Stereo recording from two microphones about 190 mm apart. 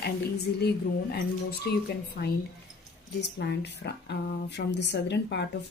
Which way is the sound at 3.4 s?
60° left (ahead or behind).